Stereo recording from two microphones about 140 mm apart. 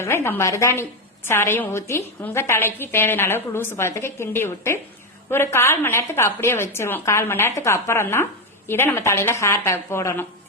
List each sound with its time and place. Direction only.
0.0 s a woman's voice: 20° left (ahead or behind)